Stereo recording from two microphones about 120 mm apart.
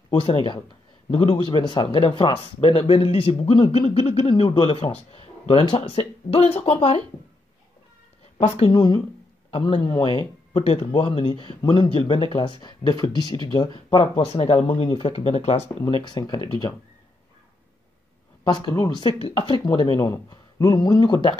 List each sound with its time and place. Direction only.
0.4 s speech: 40° left (ahead or behind)
2.6 s speech: 60° left (ahead or behind); by 4.8 s 45° left (ahead or behind)
4.8 s speech: 55° left (ahead or behind)
8.6 s speech: 40° left (ahead or behind)
10.5 s speech: 65° left (ahead or behind); by 14.2 s 45° left (ahead or behind)
14.2 s speech: 65° left (ahead or behind)
15.9 s speech: 40° left (ahead or behind)
18.4 s speech: 35° left (ahead or behind)